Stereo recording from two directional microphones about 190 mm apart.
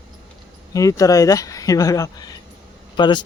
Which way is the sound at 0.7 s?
15° left (ahead or behind).